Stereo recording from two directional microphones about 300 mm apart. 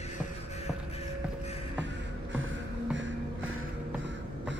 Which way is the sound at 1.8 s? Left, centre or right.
Right.